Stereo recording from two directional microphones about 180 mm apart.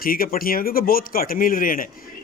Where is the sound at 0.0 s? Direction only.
55° left (ahead or behind).